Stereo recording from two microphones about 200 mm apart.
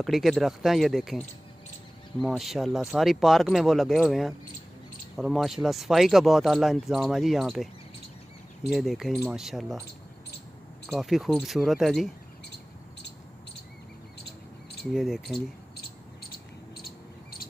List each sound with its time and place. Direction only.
0.0 s speech: centre (ahead or behind)
10.9 s speech: centre (ahead or behind)
14.9 s speech: centre (ahead or behind)
16.2 s cricket: 50° left (ahead or behind)